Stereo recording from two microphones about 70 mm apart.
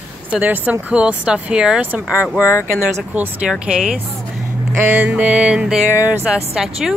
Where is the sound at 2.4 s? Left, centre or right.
Left.